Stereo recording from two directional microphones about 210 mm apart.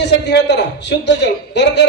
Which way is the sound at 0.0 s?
55° left (ahead or behind).